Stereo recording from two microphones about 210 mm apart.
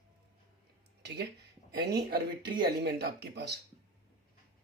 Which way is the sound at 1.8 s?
50° right (ahead or behind).